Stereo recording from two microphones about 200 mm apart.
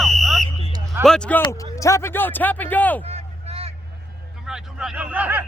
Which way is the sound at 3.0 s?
30° right (ahead or behind).